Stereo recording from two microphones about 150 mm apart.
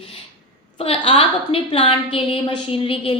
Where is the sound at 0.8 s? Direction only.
40° left (ahead or behind).